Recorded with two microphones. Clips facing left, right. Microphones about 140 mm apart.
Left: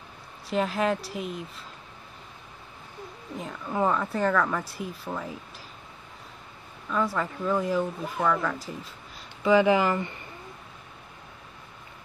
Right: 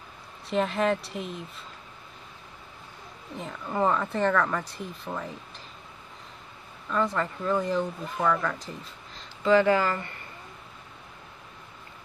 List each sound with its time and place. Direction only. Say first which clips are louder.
0.5 s speech: right 1 dB; centre (ahead or behind)
3.3 s speech: even; centre (ahead or behind)
6.9 s speech: even; 5° left (ahead or behind)